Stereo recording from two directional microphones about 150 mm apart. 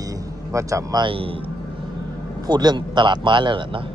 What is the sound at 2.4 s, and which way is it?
A man's voice, 30° right (ahead or behind).